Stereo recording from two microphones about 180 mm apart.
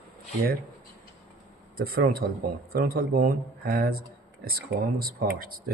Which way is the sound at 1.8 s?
55° right (ahead or behind).